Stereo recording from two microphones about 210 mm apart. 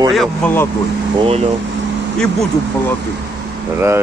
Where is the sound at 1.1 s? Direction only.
30° right (ahead or behind).